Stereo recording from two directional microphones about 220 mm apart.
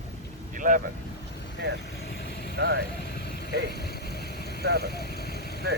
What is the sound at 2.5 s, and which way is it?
Speech, 45° right (ahead or behind).